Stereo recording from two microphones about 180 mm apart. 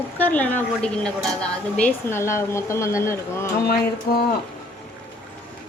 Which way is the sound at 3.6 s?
55° left (ahead or behind).